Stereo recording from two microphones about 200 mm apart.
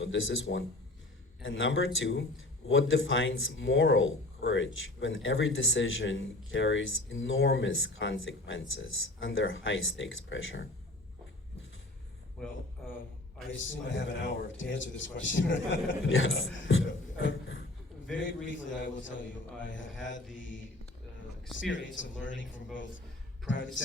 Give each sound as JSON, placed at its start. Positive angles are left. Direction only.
{"t": 0.0, "sound": "speech", "side_deg": 75}
{"t": 13.5, "sound": "speech", "side_deg": 70}
{"t": 21.7, "sound": "speech", "side_deg": 70}